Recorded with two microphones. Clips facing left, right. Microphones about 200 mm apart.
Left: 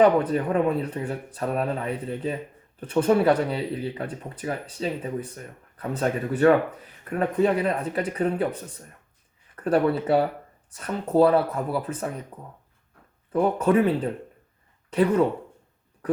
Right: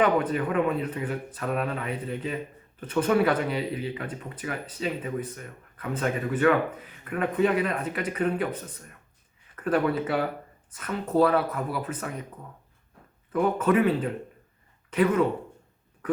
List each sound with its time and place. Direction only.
0.0 s speech: 30° left (ahead or behind)
9.6 s speech: 30° left (ahead or behind)
13.3 s speech: 30° left (ahead or behind)